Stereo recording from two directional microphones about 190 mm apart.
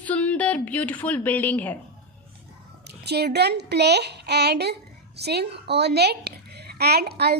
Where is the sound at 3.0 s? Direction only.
60° right (ahead or behind).